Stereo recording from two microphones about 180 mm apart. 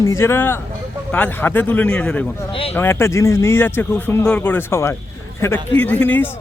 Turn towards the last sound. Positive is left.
turn(degrees=10)  # may be behind; listen again after turning